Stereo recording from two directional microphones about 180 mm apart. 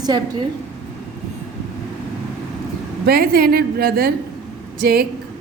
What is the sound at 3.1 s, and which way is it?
Speech, 60° right (ahead or behind).